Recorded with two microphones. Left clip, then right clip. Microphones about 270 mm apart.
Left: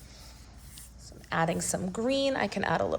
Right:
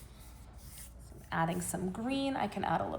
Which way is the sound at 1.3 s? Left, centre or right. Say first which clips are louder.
Left 5 dB; centre.